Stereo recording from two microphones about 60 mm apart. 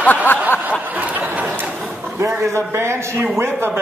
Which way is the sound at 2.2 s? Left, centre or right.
Right.